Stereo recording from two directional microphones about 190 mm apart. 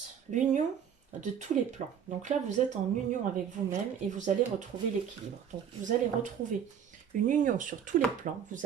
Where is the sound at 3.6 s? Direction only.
40° right (ahead or behind).